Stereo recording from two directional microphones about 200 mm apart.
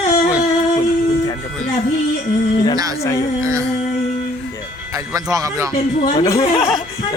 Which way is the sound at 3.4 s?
15° right (ahead or behind).